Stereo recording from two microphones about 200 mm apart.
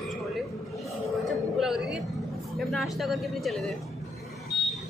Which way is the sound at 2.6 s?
Centre (ahead or behind).